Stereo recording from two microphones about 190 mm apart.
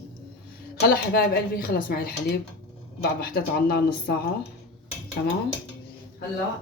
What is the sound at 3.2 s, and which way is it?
Speech, 50° left (ahead or behind).